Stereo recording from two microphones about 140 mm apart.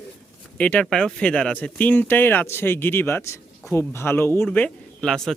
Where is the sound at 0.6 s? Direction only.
10° left (ahead or behind).